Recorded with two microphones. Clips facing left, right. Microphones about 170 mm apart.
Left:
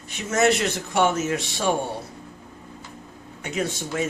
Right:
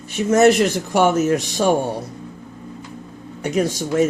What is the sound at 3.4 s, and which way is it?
Speech, 40° right (ahead or behind).